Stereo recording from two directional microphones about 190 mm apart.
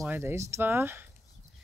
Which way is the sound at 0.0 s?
10° right (ahead or behind).